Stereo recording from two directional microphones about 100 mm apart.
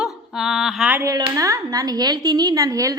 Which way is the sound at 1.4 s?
35° right (ahead or behind).